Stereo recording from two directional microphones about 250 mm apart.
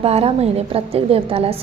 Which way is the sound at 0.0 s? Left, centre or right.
Right.